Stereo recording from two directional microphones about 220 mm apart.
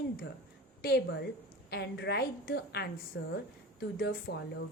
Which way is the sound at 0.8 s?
45° left (ahead or behind).